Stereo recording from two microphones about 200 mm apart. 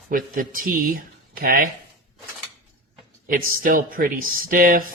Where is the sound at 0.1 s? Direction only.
45° right (ahead or behind).